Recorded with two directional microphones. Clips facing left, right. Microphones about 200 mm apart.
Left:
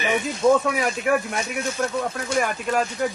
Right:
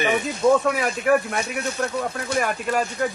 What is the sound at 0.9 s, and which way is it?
Speech, 60° right (ahead or behind).